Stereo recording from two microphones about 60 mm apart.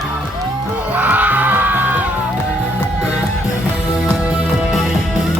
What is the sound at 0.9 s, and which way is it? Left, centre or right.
Music, right.